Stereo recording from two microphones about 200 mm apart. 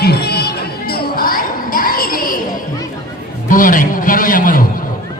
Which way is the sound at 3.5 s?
40° left (ahead or behind).